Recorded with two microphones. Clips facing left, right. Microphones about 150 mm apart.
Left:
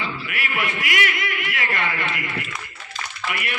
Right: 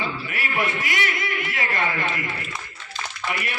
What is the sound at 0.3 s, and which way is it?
A man's voice, 30° right (ahead or behind).